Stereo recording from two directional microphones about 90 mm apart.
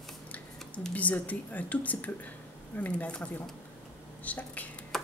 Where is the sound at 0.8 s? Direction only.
15° left (ahead or behind).